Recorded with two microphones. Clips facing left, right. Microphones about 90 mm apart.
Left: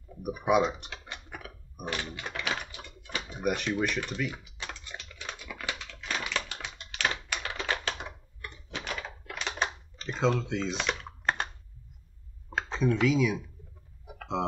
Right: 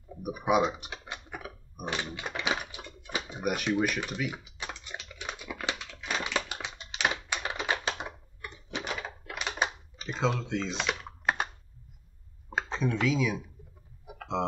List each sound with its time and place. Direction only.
0.1 s speech: 5° right (ahead or behind)
0.8 s typing: 20° right (ahead or behind)
1.9 s speech: 15° right (ahead or behind)
2.5 s a sound: 10° right (ahead or behind)
3.4 s speech: 5° right (ahead or behind)
4.3 s typing: 20° right (ahead or behind)
5.9 s a sound: 15° right (ahead or behind)
6.1 s typing: 20° right (ahead or behind)
12.4 s a sound: centre (ahead or behind)